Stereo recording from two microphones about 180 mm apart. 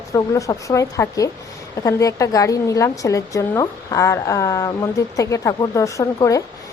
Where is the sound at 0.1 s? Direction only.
20° left (ahead or behind).